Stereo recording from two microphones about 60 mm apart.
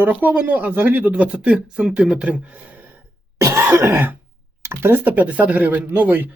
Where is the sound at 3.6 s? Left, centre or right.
Right.